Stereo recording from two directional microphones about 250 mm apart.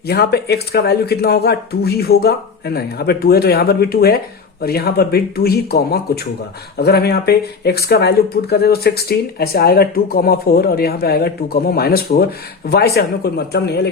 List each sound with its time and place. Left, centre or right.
0.1 s speech: left